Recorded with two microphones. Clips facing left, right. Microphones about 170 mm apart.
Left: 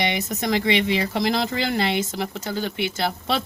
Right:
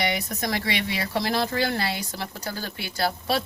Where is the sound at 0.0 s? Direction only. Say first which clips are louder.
Left 2 dB; 20° left (ahead or behind).